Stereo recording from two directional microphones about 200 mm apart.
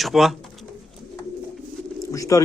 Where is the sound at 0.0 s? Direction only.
Centre (ahead or behind).